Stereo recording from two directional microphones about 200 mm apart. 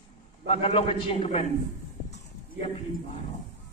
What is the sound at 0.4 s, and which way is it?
A man's voice, 30° left (ahead or behind).